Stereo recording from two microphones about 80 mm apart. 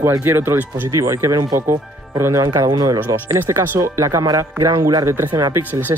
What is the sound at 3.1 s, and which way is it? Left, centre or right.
Speech, right.